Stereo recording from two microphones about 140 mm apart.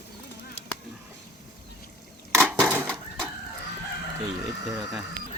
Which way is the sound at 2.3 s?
15° right (ahead or behind).